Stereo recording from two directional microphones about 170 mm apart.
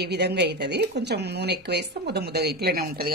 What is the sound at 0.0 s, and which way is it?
Speech, 75° right (ahead or behind).